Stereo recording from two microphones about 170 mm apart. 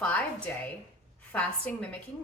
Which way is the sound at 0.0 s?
10° left (ahead or behind).